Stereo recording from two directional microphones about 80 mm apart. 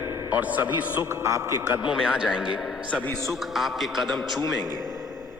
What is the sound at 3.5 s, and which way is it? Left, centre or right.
Speech, centre.